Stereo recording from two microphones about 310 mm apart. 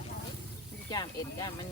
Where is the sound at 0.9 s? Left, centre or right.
Centre.